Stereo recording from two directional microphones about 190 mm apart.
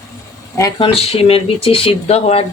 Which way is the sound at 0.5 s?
20° left (ahead or behind).